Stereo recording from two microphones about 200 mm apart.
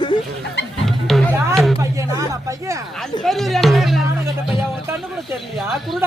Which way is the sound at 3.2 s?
Centre (ahead or behind).